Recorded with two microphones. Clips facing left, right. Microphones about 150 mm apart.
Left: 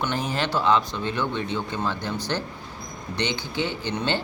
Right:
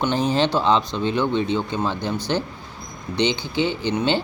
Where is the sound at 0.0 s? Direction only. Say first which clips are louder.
Right 6 dB; 25° right (ahead or behind).